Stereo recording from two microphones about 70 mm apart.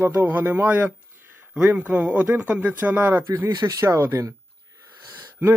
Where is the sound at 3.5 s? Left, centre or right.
Right.